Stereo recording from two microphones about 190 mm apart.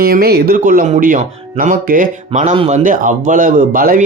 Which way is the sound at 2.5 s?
30° right (ahead or behind).